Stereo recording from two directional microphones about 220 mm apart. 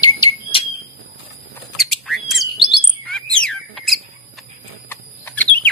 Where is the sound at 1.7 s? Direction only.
Centre (ahead or behind).